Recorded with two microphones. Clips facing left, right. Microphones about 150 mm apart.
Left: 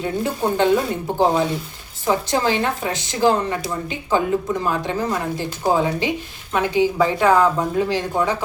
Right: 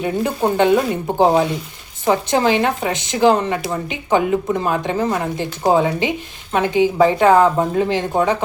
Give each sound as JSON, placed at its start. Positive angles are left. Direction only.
{"t": 0.0, "sound": "a woman's voice", "side_deg": -15}